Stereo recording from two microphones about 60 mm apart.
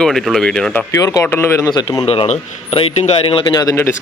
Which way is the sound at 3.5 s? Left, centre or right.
Left.